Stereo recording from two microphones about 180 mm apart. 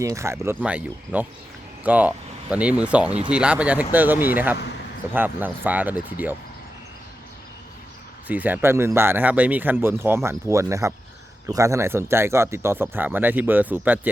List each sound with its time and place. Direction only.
0.0 s speech: 15° right (ahead or behind)
8.3 s speech: 10° right (ahead or behind)